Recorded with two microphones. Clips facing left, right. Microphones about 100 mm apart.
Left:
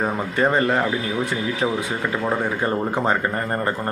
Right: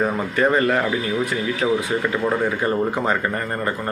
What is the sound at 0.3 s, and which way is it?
Speech, 25° left (ahead or behind).